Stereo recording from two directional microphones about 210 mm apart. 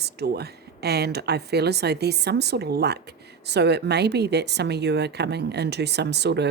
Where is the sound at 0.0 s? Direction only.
50° right (ahead or behind).